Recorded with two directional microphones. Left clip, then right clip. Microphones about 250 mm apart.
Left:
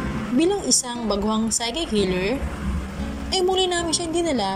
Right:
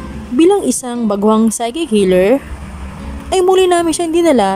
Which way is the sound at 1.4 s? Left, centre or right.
Right.